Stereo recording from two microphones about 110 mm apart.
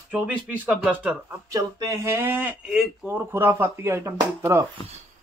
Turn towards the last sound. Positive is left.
turn(degrees=-25)  # may be behind; listen again after turning